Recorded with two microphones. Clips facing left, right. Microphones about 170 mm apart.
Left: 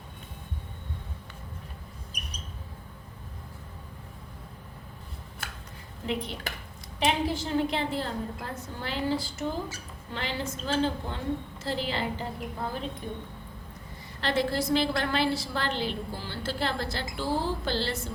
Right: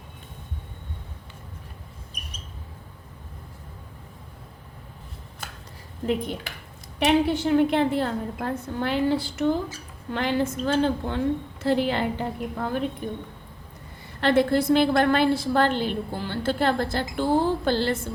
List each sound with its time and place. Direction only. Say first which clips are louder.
6.0 s a woman's voice: right 6 dB; 40° right (ahead or behind)
7.0 s a woman's voice: right 7 dB; 65° right (ahead or behind)
14.2 s a woman's voice: right 7 dB; 55° right (ahead or behind)